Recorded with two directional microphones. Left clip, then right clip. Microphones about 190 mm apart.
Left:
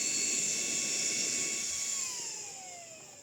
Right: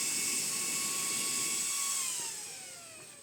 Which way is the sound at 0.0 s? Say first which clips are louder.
Left 2 dB; 20° right (ahead or behind).